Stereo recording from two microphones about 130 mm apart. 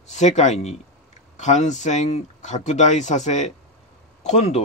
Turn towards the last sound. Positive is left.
turn(degrees=55)  # may be behind; listen again after turning